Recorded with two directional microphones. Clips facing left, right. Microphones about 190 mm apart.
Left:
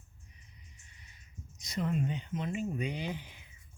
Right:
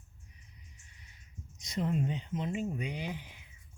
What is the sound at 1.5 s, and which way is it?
Speech, 25° right (ahead or behind).